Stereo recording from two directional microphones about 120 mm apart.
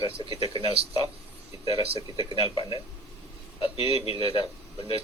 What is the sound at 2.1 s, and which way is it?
Speech, 45° left (ahead or behind).